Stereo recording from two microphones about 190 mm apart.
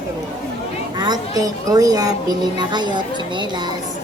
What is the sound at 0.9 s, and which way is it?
A woman's voice, 20° right (ahead or behind).